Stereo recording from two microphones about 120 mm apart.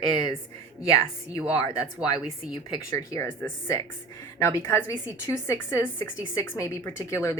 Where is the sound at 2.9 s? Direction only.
25° left (ahead or behind).